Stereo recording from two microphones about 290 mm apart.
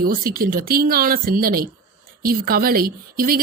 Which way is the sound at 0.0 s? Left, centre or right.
Right.